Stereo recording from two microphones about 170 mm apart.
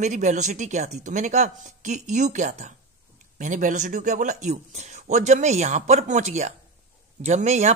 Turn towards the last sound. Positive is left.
turn(degrees=-45)  # may be behind; listen again after turning